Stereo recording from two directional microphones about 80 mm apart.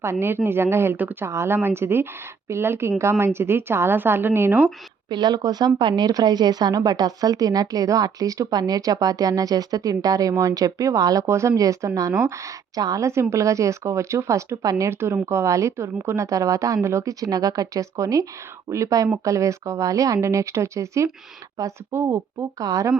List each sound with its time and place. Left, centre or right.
0.0 s a woman's voice: right
5.0 s a woman's voice: right
14.8 s a woman's voice: right